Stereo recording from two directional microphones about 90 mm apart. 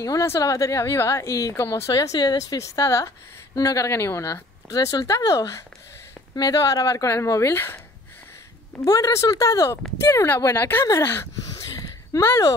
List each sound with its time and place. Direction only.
0.0 s speech: 35° left (ahead or behind)
8.8 s speech: 40° left (ahead or behind)
11.4 s a sound: 40° left (ahead or behind)
12.1 s speech: 35° left (ahead or behind)